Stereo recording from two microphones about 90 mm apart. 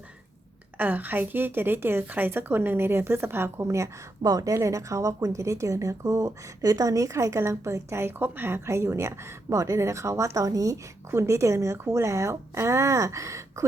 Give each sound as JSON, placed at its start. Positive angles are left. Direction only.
{"t": 0.8, "sound": "a woman's voice", "side_deg": -20}
{"t": 4.2, "sound": "speech", "side_deg": -40}